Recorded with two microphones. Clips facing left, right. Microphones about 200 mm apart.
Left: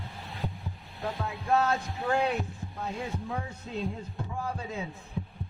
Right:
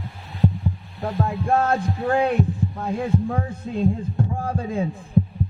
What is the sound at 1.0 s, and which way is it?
A man's voice, 50° right (ahead or behind).